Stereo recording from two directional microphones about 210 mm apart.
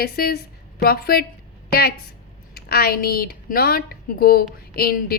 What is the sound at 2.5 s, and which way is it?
A woman's voice, 45° left (ahead or behind).